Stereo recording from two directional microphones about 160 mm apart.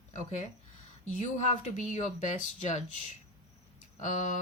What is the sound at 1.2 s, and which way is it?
Speech, 50° left (ahead or behind).